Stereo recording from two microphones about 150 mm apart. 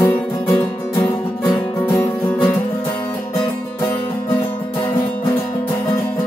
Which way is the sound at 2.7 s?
35° left (ahead or behind).